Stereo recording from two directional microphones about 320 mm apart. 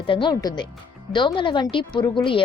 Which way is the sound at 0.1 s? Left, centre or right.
Centre.